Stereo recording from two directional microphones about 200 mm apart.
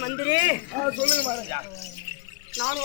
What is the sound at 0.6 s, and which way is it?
Speech, centre (ahead or behind).